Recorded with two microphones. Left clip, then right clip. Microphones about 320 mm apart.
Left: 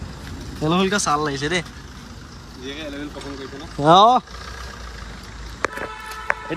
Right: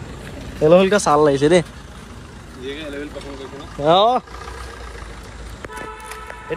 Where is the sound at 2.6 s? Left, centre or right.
Left.